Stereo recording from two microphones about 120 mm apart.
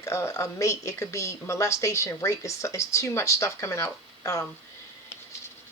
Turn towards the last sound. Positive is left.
turn(degrees=25)  # may be behind; listen again after turning